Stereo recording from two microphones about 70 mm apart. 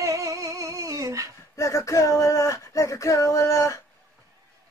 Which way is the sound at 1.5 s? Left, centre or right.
Left.